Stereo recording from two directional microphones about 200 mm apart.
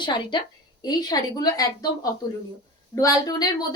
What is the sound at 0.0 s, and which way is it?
A woman's voice, 25° left (ahead or behind).